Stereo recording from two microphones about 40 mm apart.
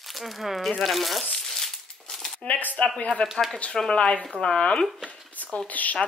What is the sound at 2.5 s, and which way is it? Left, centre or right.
Speech, left.